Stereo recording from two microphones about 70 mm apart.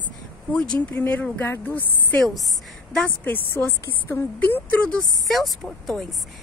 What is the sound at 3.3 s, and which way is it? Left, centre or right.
Speech, left.